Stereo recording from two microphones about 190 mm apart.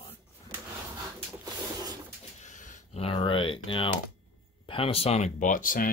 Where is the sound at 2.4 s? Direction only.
40° left (ahead or behind).